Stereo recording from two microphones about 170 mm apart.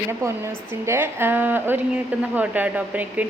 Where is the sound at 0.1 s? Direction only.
15° right (ahead or behind).